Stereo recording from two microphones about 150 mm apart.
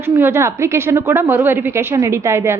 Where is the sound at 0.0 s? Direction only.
15° right (ahead or behind).